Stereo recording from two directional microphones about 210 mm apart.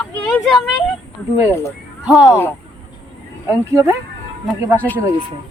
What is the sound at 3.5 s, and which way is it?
Speech, 15° right (ahead or behind).